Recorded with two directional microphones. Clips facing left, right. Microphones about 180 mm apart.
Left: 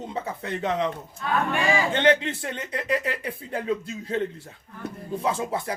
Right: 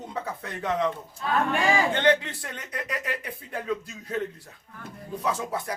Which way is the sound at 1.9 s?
20° left (ahead or behind).